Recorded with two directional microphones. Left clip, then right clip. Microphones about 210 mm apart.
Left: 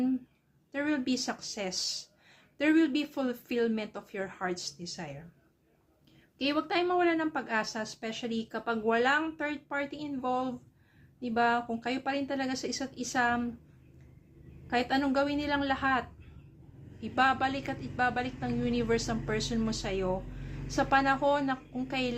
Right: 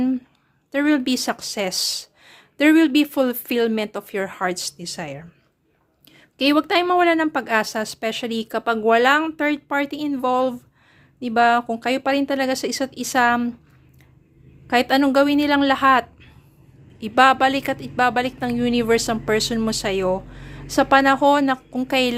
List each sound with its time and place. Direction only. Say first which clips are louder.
0.7 s speech: right 12 dB; 55° right (ahead or behind)
6.4 s speech: right 12 dB; 50° right (ahead or behind)
14.7 s speech: right 12 dB; 50° right (ahead or behind)